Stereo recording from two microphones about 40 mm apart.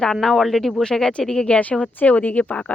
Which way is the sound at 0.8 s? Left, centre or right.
Centre.